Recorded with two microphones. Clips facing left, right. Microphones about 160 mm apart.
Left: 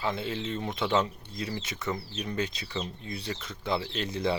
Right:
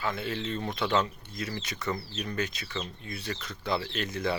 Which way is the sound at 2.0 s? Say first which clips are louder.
Even; 10° left (ahead or behind).